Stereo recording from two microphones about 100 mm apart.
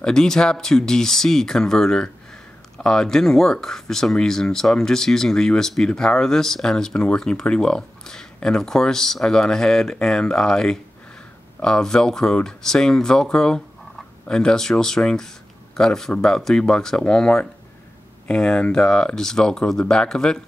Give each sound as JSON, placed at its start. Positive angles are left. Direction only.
{"t": 0.0, "sound": "speech", "side_deg": 5}